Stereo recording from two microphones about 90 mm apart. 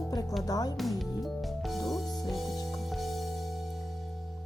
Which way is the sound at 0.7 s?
Centre (ahead or behind).